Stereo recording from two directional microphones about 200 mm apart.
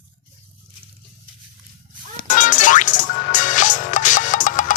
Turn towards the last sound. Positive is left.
turn(degrees=40)  # may be behind; listen again after turning